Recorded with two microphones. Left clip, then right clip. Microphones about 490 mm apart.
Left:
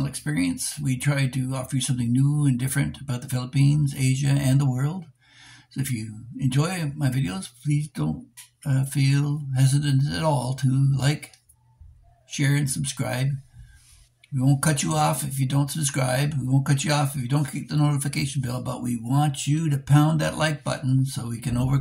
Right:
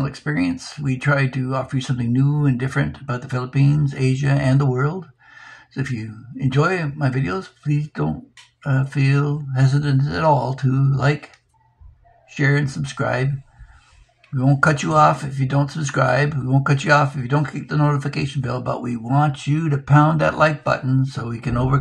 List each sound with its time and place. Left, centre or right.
0.0 s speech: left
6.5 s speech: left
12.4 s speech: left
14.4 s speech: left